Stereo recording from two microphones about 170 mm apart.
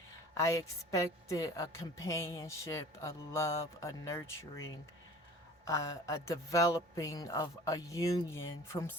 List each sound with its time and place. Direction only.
0.3 s a woman's voice: 20° left (ahead or behind)